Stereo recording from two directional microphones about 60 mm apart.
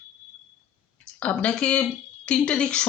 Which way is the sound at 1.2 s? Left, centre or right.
Left.